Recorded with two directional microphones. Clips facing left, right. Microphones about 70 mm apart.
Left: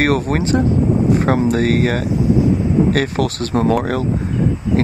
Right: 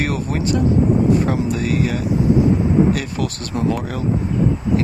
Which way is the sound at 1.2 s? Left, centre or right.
Left.